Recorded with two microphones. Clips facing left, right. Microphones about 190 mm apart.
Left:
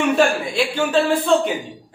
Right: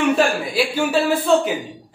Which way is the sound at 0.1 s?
5° right (ahead or behind).